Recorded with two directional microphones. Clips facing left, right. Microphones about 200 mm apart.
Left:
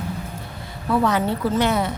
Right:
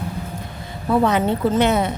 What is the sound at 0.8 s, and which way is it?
Speech, 20° right (ahead or behind).